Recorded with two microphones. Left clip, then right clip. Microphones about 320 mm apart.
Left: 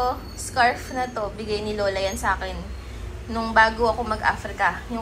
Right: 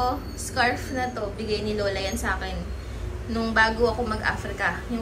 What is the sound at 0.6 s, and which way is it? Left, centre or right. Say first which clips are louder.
A woman's voice: left 3 dB; centre.